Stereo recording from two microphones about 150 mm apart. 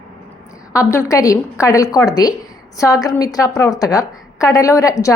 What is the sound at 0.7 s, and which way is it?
A woman's voice, 20° left (ahead or behind).